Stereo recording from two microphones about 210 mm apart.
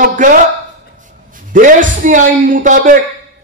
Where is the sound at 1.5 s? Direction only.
40° right (ahead or behind).